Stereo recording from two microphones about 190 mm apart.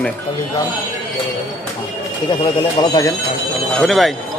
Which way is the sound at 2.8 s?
20° left (ahead or behind).